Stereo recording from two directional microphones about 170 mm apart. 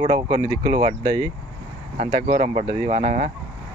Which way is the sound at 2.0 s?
35° right (ahead or behind).